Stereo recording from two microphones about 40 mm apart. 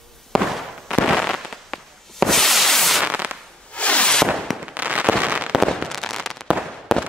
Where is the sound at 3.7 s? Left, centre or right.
Left.